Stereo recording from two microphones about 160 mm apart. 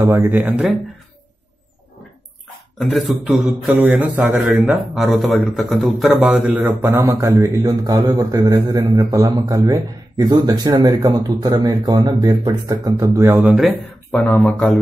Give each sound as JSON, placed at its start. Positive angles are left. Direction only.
{"t": 0.0, "sound": "speech", "side_deg": -15}
{"t": 2.8, "sound": "a man's voice", "side_deg": 0}
{"t": 6.8, "sound": "a man's voice", "side_deg": -15}
{"t": 13.7, "sound": "speech", "side_deg": 10}